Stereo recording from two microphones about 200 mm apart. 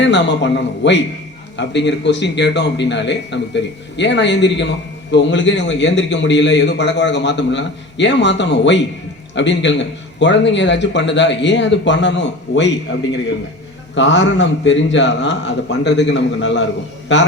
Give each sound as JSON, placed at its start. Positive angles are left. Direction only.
{"t": 0.0, "sound": "a man's voice", "side_deg": 60}
{"t": 13.9, "sound": "a man's voice", "side_deg": 65}